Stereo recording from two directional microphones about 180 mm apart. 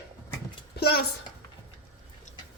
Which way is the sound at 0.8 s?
60° left (ahead or behind).